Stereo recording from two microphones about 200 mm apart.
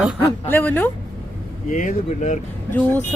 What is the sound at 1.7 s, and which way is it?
Speech, 40° left (ahead or behind).